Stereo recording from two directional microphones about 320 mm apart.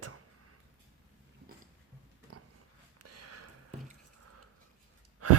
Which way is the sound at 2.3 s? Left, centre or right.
Right.